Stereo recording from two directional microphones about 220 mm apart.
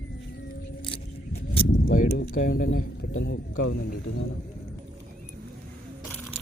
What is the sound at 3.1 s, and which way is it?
Speech, 55° left (ahead or behind).